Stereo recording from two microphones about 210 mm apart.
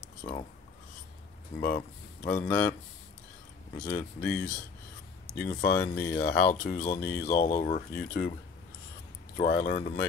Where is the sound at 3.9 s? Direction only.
5° left (ahead or behind).